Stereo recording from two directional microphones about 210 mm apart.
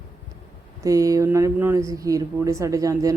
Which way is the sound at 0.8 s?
15° right (ahead or behind).